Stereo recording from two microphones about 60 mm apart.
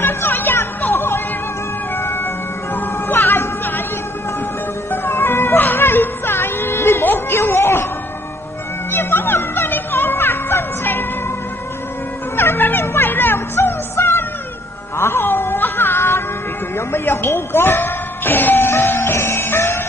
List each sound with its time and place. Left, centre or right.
0.0 s music: left
2.7 s music: left
4.9 s music: left
8.9 s music: left
12.4 s music: left
15.0 s cat: left
16.7 s music: left